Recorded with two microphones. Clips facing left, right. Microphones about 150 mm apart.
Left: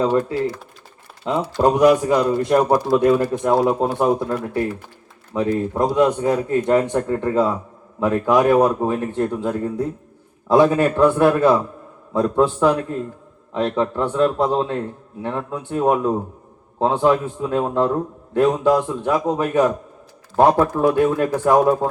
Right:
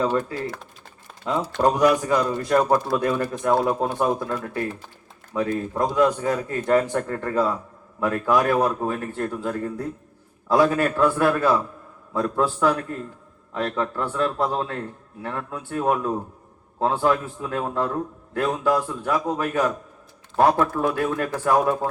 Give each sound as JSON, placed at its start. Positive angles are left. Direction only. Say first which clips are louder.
{"t": 0.0, "sound": "a man's voice", "louder": "left 5 dB", "side_deg": 25}
{"t": 5.3, "sound": "a man's voice", "louder": "left 4 dB", "side_deg": 25}